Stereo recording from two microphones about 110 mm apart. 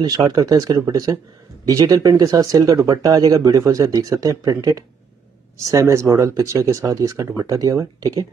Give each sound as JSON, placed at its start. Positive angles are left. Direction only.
{"t": 0.0, "sound": "speech", "side_deg": -35}